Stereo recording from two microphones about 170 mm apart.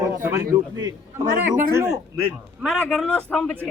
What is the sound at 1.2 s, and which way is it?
Speech, 50° right (ahead or behind).